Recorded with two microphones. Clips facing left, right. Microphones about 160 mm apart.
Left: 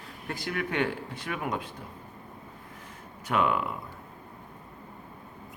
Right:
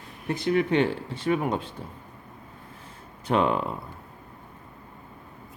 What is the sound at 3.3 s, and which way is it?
Speech, 30° right (ahead or behind).